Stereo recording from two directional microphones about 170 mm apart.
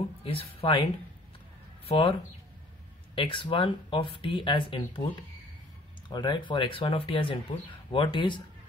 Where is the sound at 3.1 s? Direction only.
30° left (ahead or behind).